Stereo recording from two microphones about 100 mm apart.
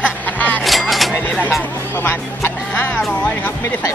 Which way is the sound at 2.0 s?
25° left (ahead or behind).